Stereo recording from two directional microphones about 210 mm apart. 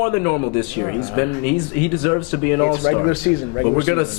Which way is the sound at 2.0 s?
15° left (ahead or behind).